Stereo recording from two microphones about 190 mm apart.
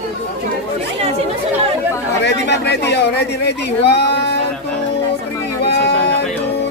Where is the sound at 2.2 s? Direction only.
65° left (ahead or behind).